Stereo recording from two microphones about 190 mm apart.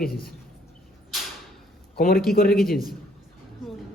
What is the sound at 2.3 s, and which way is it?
Speech, 50° left (ahead or behind).